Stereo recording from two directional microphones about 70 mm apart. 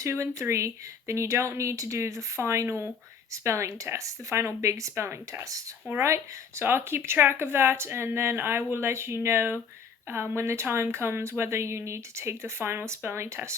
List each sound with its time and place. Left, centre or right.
0.0 s speech: right
3.4 s speech: right